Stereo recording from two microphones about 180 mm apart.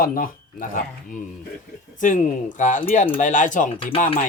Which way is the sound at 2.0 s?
45° left (ahead or behind).